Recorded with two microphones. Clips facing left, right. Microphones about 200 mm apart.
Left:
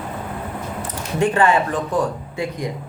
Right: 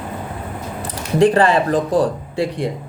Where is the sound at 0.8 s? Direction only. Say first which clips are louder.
Right 7 dB; 35° right (ahead or behind).